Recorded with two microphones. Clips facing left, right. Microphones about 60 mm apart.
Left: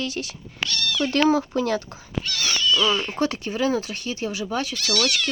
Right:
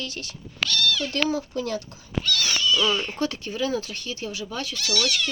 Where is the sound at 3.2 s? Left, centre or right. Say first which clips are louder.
Left 3 dB; left.